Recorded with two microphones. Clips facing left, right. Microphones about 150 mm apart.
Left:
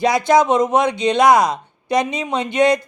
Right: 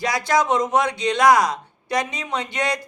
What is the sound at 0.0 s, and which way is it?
Speech, 25° left (ahead or behind).